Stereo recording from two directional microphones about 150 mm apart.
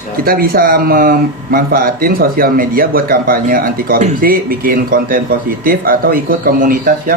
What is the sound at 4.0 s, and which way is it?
Speech, 50° right (ahead or behind).